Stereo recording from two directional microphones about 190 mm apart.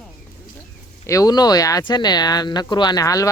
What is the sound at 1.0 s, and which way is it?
Speech, 15° left (ahead or behind).